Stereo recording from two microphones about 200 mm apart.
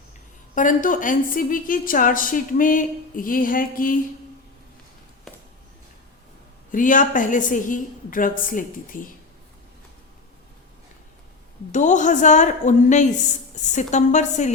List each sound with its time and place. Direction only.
0.5 s a woman's voice: 40° left (ahead or behind)
6.7 s a woman's voice: 40° left (ahead or behind)
11.7 s a woman's voice: 40° left (ahead or behind)